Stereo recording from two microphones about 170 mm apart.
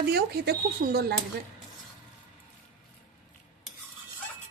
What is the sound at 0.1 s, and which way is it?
Speech, 65° right (ahead or behind).